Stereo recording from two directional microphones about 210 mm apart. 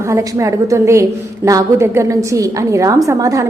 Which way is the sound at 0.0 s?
15° right (ahead or behind).